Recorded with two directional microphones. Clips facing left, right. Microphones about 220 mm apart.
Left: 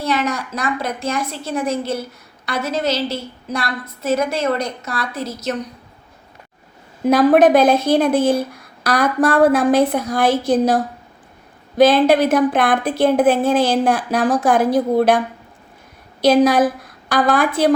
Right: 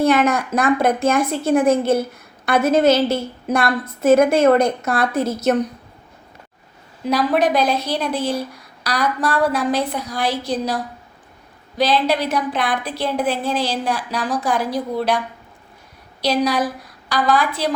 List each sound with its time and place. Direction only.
0.0 s a woman's voice: 55° right (ahead or behind)
7.0 s a woman's voice: 50° left (ahead or behind)
16.2 s a woman's voice: 50° left (ahead or behind)